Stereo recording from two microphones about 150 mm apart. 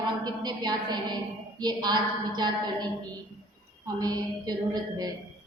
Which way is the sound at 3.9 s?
25° right (ahead or behind).